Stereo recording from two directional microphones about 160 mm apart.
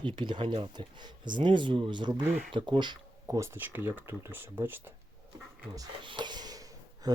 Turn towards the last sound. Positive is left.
turn(degrees=-25)  # may be behind; listen again after turning